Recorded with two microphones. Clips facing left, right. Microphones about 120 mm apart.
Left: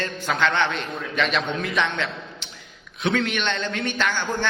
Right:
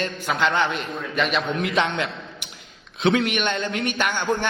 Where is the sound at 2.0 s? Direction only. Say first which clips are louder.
Right 1 dB; 15° right (ahead or behind).